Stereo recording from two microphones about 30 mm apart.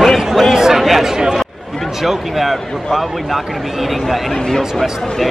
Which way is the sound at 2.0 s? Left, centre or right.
Centre.